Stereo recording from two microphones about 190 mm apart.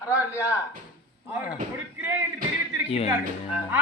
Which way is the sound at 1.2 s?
10° right (ahead or behind).